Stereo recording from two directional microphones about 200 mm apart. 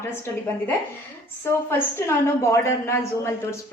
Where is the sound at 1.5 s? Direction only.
10° left (ahead or behind).